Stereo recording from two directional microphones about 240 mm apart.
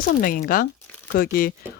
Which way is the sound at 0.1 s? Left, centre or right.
Left.